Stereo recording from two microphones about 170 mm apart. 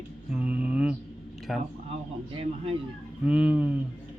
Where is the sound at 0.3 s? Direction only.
10° right (ahead or behind).